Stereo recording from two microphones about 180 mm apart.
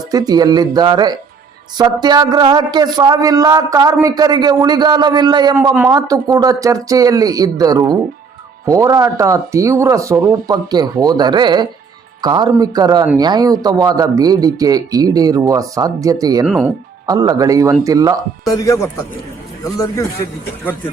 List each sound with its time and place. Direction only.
0.1 s a man's voice: 20° right (ahead or behind)
18.4 s speech: 20° left (ahead or behind)